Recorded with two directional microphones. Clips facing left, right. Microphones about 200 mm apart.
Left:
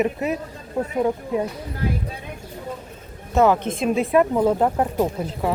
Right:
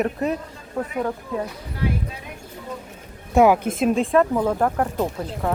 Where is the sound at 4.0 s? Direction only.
10° left (ahead or behind).